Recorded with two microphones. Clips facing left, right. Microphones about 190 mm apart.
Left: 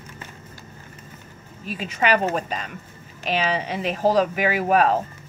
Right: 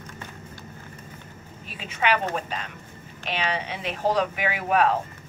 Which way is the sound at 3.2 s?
40° left (ahead or behind).